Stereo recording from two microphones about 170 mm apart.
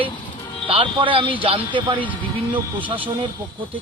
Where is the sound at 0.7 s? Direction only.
30° right (ahead or behind).